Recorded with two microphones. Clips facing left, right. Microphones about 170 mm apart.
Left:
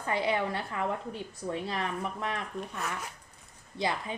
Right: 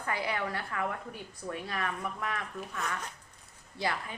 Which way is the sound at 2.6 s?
Centre (ahead or behind).